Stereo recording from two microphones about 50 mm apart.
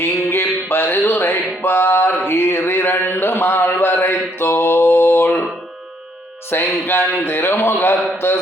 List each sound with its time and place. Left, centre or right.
0.0 s music: left
6.5 s music: left